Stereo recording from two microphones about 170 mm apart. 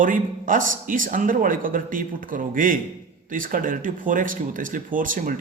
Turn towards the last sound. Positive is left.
turn(degrees=-50)  # may be behind; listen again after turning